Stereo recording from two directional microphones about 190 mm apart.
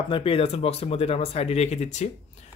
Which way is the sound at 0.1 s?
30° left (ahead or behind).